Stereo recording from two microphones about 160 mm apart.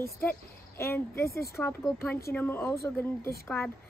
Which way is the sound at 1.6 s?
15° left (ahead or behind).